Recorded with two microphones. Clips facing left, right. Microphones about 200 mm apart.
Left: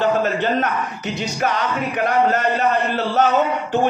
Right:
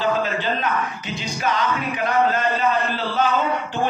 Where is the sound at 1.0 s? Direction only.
70° left (ahead or behind).